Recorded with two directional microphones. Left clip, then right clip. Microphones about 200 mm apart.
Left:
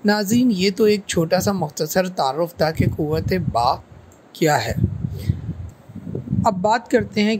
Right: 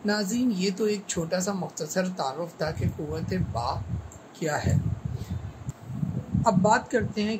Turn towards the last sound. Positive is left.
turn(degrees=45)  # may be behind; listen again after turning